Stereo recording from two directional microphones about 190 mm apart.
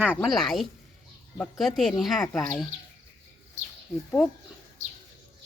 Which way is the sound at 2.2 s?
15° left (ahead or behind).